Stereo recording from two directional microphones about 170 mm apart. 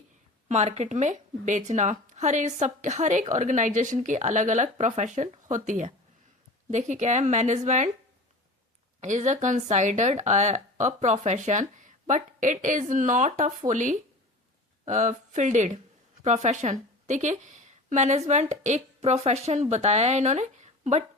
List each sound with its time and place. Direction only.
0.4 s speech: 40° right (ahead or behind)
9.0 s a woman's voice: 45° right (ahead or behind)